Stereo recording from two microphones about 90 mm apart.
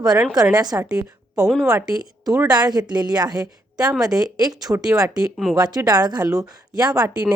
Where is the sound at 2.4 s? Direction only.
50° right (ahead or behind).